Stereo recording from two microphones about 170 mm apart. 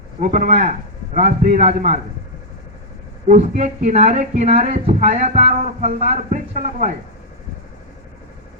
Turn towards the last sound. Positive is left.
turn(degrees=-50)  # may be behind; listen again after turning